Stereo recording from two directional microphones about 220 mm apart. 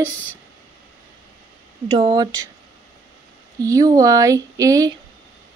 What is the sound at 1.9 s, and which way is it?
Speech, 20° right (ahead or behind).